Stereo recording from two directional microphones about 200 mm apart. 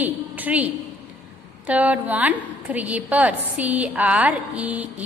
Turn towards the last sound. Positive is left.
turn(degrees=-5)  # may be behind; listen again after turning